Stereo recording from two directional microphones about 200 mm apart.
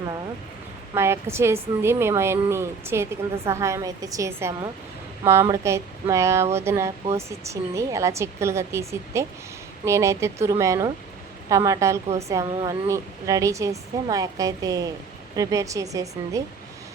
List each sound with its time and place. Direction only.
0.9 s a woman's voice: 15° right (ahead or behind)